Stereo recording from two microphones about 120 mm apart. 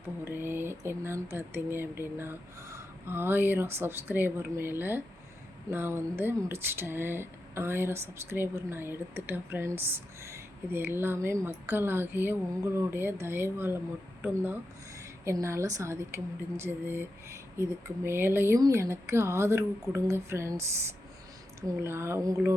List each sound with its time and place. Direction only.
0.3 s speech: 20° right (ahead or behind)
21.7 s speech: 20° right (ahead or behind)